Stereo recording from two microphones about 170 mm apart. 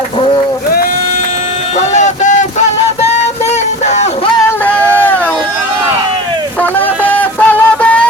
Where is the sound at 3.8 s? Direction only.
40° left (ahead or behind).